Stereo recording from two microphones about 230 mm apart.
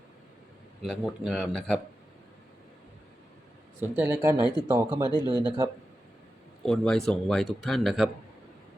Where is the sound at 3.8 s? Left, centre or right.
Centre.